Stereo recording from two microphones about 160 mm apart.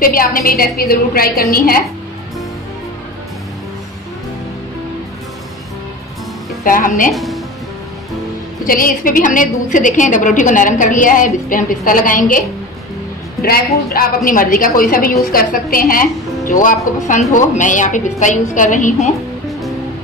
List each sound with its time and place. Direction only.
0.0 s a woman's voice: 65° left (ahead or behind)
6.6 s a woman's voice: 60° left (ahead or behind)
7.1 s speech: centre (ahead or behind)
8.6 s a woman's voice: 60° left (ahead or behind)
13.4 s a woman's voice: 70° left (ahead or behind); by 19.1 s 50° left (ahead or behind)